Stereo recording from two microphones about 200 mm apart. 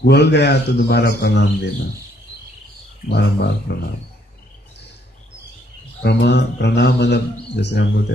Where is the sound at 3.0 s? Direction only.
55° left (ahead or behind).